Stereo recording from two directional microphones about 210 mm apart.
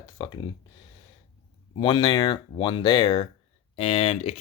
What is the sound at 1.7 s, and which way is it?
Speech, 25° left (ahead or behind).